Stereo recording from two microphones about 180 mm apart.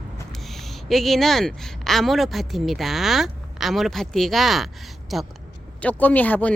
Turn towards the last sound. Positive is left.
turn(degrees=10)  # may be behind; listen again after turning